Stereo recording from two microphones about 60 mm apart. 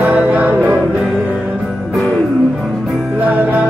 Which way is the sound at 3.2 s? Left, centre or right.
Right.